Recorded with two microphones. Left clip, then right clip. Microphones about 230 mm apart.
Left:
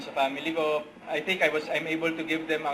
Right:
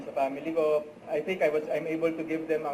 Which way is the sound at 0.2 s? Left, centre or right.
Centre.